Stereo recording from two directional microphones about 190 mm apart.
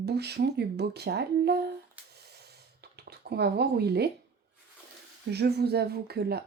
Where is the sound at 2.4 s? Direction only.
60° right (ahead or behind).